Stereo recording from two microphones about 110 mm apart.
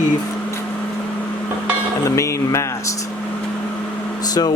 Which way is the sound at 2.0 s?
25° left (ahead or behind).